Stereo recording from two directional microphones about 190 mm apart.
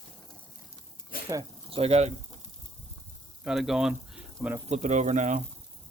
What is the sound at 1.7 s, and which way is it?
Speech, 35° right (ahead or behind).